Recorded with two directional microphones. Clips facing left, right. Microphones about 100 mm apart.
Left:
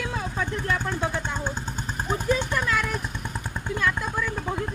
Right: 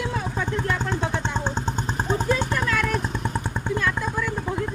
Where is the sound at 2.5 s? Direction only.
20° left (ahead or behind).